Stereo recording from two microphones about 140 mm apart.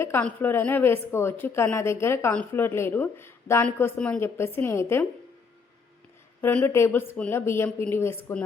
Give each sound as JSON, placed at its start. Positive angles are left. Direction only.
{"t": 0.0, "sound": "a woman's voice", "side_deg": 15}
{"t": 6.4, "sound": "a woman's voice", "side_deg": 10}